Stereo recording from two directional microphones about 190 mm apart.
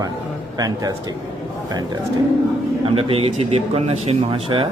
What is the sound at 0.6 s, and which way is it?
Speech, 20° right (ahead or behind).